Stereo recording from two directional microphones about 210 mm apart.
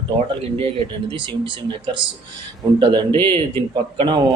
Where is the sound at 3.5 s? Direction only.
25° right (ahead or behind).